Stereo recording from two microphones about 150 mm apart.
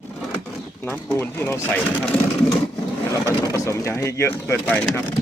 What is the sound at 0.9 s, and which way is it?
Speech, 15° left (ahead or behind).